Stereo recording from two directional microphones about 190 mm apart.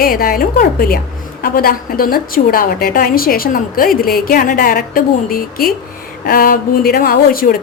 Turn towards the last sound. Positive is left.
turn(degrees=50)  # may be behind; listen again after turning